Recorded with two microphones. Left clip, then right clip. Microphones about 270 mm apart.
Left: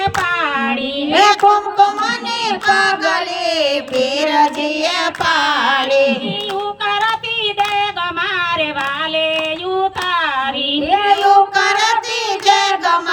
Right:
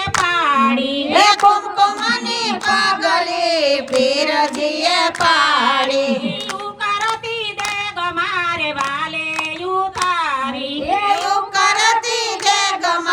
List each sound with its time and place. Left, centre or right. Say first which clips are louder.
0.4 s child singing: right 3 dB; centre
1.1 s a sound: left 1 dB; centre
2.6 s child singing: left 2 dB; centre
4.8 s music: right 3 dB; centre
11.1 s child singing: left 6 dB; centre